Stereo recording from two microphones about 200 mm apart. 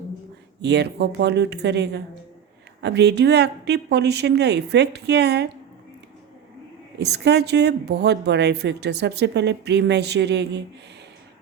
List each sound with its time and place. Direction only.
0.6 s speech: 55° right (ahead or behind)
7.0 s speech: 55° right (ahead or behind)